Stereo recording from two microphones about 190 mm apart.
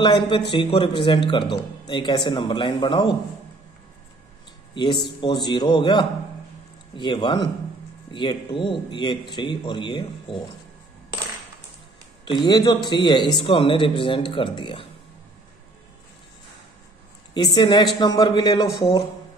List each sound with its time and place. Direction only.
0.0 s a man's voice: 25° left (ahead or behind)
5.2 s a man's voice: 25° left (ahead or behind)
12.3 s a man's voice: 20° left (ahead or behind)
17.3 s a man's voice: 25° left (ahead or behind)